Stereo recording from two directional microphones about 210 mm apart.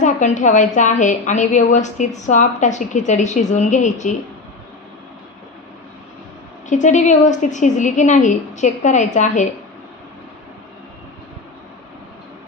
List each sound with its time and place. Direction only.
0.0 s a woman's voice: 35° left (ahead or behind)
6.7 s a woman's voice: 35° left (ahead or behind)